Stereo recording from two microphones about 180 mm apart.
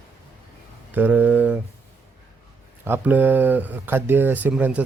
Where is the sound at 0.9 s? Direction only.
10° right (ahead or behind).